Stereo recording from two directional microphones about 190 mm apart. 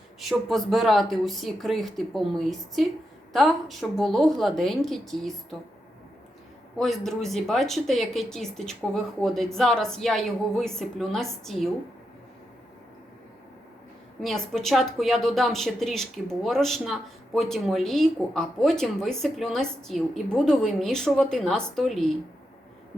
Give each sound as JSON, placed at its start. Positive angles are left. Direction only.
{"t": 0.2, "sound": "a woman's voice", "side_deg": 0}
{"t": 6.7, "sound": "a woman's voice", "side_deg": 0}
{"t": 14.2, "sound": "a woman's voice", "side_deg": 0}